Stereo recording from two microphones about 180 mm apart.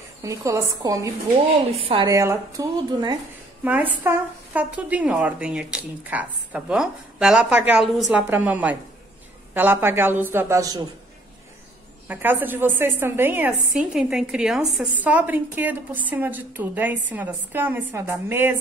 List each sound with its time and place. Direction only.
0.2 s a woman's voice: 20° right (ahead or behind)
1.7 s a woman's voice: 30° right (ahead or behind)
2.0 s speech: 20° right (ahead or behind)
3.6 s a woman's voice: 10° right (ahead or behind)
12.1 s a woman's voice: 10° right (ahead or behind)